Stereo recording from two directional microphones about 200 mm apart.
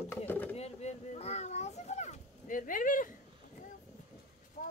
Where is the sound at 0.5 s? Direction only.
35° left (ahead or behind).